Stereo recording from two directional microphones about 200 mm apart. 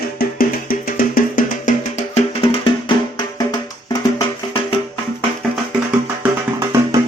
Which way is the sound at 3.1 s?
20° left (ahead or behind).